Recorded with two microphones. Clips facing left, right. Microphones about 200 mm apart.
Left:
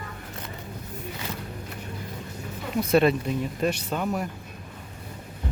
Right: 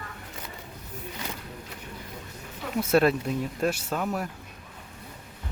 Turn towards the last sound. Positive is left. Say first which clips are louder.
# left 2 dB
turn(degrees=0)  # may be behind; listen again after turning